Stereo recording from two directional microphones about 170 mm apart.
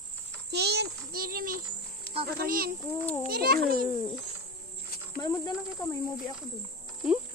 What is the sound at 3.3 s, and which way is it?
Speech, 65° right (ahead or behind).